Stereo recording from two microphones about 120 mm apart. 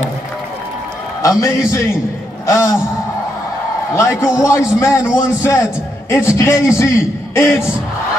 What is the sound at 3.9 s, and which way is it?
A man's voice, 25° left (ahead or behind).